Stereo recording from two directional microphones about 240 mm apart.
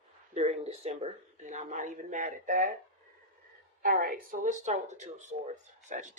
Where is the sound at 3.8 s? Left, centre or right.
Right.